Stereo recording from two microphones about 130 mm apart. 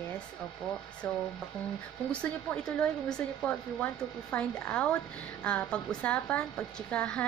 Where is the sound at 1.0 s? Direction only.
15° left (ahead or behind).